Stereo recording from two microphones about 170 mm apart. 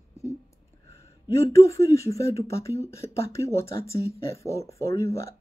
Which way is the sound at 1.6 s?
20° left (ahead or behind).